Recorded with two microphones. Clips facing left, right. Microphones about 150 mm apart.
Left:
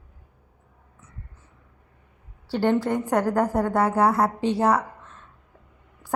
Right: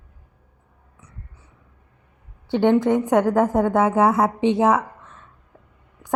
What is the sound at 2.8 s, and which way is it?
Speech, 20° right (ahead or behind).